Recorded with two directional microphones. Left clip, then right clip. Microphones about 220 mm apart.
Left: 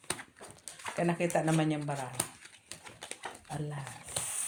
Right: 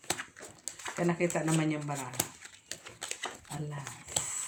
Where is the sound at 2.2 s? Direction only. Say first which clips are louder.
Right 2 dB; 20° right (ahead or behind).